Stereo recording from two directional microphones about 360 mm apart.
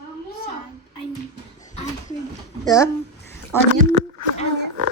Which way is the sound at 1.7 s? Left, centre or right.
Centre.